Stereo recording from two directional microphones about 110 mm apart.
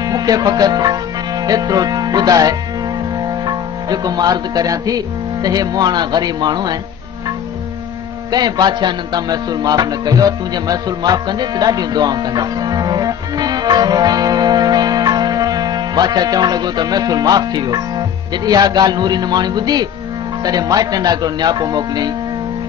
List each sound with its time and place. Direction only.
0.1 s a man's voice: 35° right (ahead or behind)
8.3 s music: 40° right (ahead or behind)
20.4 s a man's voice: 35° right (ahead or behind)